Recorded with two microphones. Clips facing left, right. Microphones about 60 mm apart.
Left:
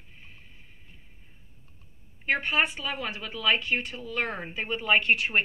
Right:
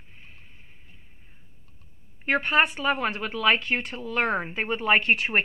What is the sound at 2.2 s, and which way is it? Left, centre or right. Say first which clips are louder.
A woman's voice: right 4 dB; right.